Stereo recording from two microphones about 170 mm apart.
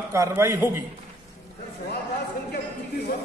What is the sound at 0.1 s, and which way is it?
Speech, 15° right (ahead or behind).